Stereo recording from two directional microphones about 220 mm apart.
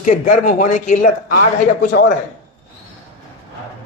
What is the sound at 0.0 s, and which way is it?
Speech, 35° left (ahead or behind).